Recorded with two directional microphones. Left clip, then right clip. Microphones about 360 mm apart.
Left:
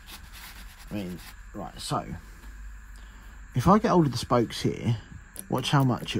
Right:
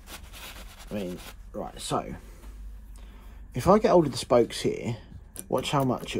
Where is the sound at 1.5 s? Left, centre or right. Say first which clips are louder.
Right 1 dB; left.